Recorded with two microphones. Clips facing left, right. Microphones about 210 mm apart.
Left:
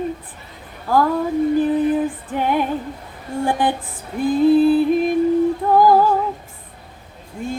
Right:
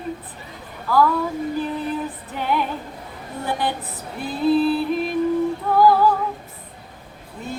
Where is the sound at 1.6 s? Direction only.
50° left (ahead or behind).